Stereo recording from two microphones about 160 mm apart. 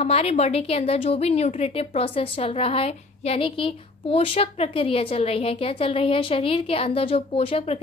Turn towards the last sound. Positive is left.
turn(degrees=35)  # may be behind; listen again after turning